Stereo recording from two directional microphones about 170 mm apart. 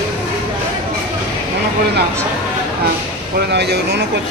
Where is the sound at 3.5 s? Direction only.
75° right (ahead or behind).